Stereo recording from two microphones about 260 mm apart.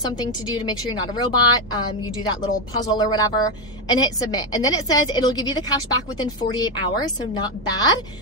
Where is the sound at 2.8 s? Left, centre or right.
Centre.